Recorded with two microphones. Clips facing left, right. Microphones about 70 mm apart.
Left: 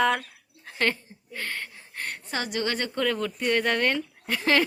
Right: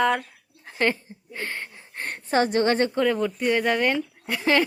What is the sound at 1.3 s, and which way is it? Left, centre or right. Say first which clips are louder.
A woman's voice: right 1 dB; right.